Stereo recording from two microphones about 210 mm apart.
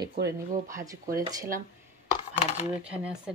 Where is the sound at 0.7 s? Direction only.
15° right (ahead or behind).